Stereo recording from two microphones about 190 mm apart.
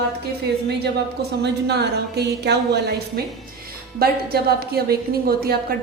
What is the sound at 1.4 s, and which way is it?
A woman's voice, 60° right (ahead or behind).